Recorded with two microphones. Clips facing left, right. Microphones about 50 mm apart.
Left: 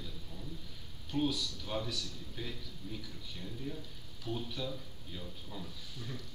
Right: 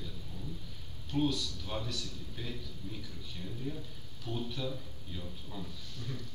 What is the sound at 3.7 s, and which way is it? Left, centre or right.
Speech, centre.